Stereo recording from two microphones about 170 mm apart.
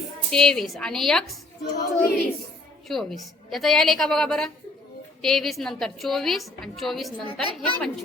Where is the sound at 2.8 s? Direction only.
Centre (ahead or behind).